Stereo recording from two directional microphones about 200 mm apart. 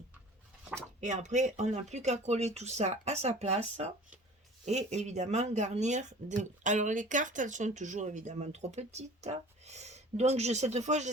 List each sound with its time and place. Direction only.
1.0 s speech: 35° right (ahead or behind)